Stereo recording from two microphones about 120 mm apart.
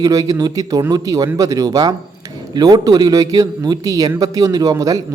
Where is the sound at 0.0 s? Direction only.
30° right (ahead or behind).